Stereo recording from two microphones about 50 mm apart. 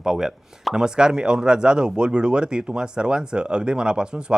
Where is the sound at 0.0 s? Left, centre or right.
Centre.